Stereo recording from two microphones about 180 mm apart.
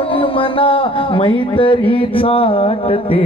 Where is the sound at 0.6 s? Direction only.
30° left (ahead or behind).